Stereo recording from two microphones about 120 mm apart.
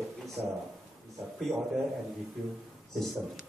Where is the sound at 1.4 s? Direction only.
Centre (ahead or behind).